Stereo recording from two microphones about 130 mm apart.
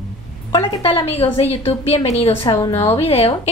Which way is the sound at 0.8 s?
50° left (ahead or behind).